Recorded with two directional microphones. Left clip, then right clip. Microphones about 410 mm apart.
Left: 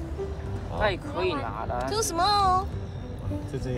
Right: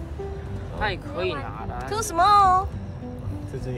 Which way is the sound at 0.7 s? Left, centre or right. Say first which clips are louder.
Left 1 dB; centre.